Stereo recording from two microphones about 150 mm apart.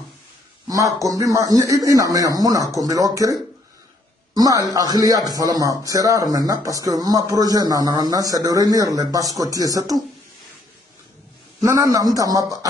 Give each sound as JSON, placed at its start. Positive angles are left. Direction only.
{"t": 0.7, "sound": "speech", "side_deg": -25}
{"t": 11.6, "sound": "speech", "side_deg": -20}